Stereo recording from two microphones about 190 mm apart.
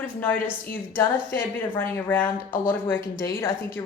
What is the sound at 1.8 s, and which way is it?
Speech, 10° left (ahead or behind).